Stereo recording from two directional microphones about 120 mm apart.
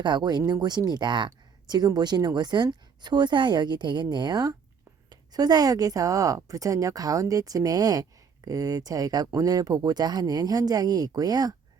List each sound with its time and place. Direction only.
0.0 s speech: 40° right (ahead or behind)